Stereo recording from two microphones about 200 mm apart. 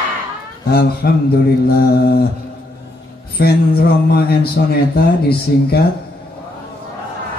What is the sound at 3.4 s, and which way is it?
Speech, 50° left (ahead or behind).